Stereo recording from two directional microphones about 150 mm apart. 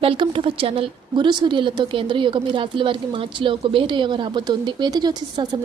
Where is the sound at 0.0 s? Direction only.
35° right (ahead or behind).